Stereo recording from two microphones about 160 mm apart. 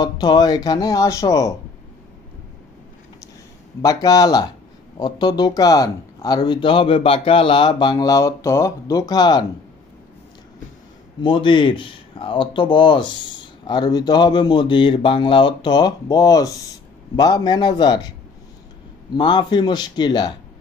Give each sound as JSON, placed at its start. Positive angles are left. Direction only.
{"t": 0.0, "sound": "speech", "side_deg": 25}
{"t": 3.8, "sound": "speech", "side_deg": 25}
{"t": 11.1, "sound": "speech", "side_deg": 30}
{"t": 19.1, "sound": "speech", "side_deg": 25}